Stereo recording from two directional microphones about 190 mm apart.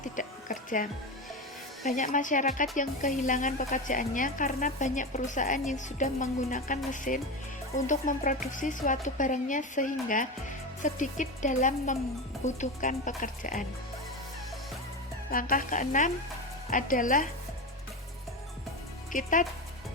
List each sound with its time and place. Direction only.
0.0 s music: 45° left (ahead or behind)
1.8 s speech: 40° left (ahead or behind)
15.3 s speech: 50° left (ahead or behind)
19.1 s speech: 45° left (ahead or behind)